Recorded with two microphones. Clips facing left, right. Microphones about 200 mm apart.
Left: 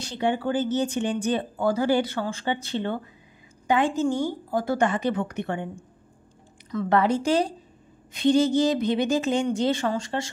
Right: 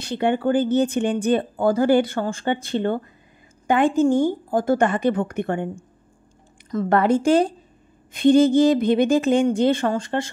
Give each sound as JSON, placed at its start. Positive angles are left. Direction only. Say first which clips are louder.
{"t": 0.0, "sound": "speech", "louder": "right 5 dB", "side_deg": -60}